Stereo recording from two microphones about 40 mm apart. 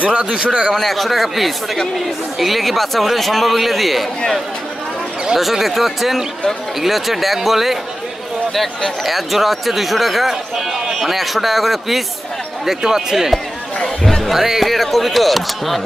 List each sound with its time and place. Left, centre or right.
0.0 s a man's voice: right
0.7 s speech: centre
5.4 s speech: centre
14.0 s music: centre
14.3 s speech: centre